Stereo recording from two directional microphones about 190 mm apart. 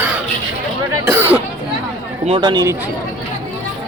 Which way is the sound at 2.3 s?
25° right (ahead or behind).